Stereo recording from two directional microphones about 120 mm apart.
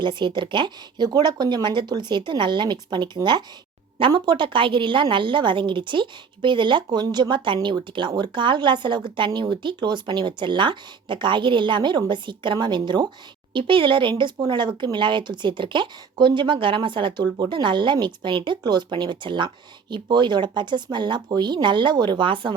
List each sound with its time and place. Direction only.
0.0 s a woman's voice: 40° right (ahead or behind)